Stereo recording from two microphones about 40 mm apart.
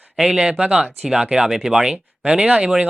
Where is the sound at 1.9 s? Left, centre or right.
Right.